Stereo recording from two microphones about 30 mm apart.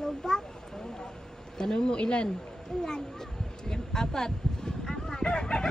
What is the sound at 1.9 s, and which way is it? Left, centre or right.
Speech, left.